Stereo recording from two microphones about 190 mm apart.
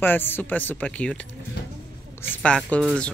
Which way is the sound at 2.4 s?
5° left (ahead or behind).